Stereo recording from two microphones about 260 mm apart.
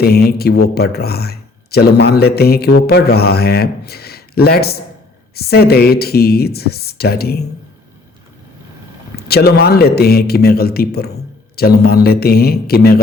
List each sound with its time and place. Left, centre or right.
0.0 s speech: left
9.1 s speech: left